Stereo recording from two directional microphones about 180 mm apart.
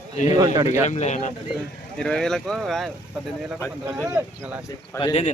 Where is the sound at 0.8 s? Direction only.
40° left (ahead or behind).